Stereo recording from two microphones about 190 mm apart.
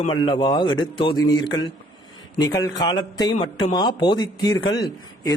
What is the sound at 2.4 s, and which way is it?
A man's voice, 20° left (ahead or behind).